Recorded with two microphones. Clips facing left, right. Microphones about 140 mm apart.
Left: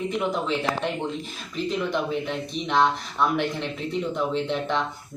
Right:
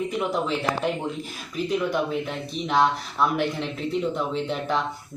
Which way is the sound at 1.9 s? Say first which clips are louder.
Even; 5° right (ahead or behind).